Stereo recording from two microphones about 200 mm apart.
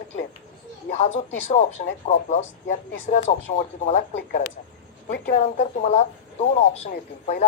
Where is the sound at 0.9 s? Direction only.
35° left (ahead or behind).